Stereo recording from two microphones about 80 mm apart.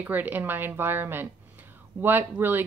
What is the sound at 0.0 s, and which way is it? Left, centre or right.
A woman's voice, right.